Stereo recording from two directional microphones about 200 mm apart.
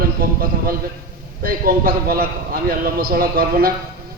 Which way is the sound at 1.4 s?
45° right (ahead or behind).